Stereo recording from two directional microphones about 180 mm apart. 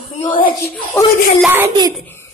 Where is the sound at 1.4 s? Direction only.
10° right (ahead or behind).